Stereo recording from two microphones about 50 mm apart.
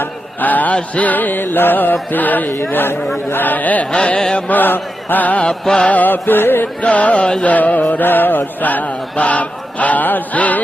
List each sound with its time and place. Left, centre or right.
0.0 s a sound: left
0.8 s chant: left
2.7 s music: left
3.4 s chant: left
3.9 s music: left
4.4 s chant: left
5.5 s music: centre
5.9 s music: left
6.8 s music: left
7.4 s chant: left